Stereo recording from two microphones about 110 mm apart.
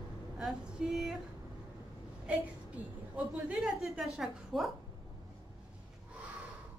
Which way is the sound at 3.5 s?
Centre (ahead or behind).